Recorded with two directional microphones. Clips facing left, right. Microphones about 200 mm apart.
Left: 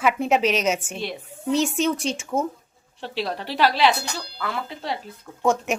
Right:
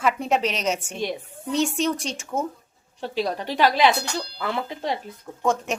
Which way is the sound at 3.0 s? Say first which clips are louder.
Right 3 dB; 40° right (ahead or behind).